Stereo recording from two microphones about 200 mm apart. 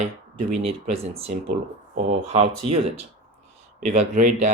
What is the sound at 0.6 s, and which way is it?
Speech, 30° right (ahead or behind).